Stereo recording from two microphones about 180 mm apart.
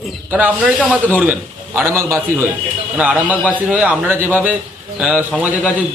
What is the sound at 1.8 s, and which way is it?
A man's voice, 15° right (ahead or behind).